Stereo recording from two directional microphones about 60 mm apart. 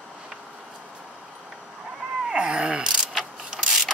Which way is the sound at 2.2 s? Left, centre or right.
Centre.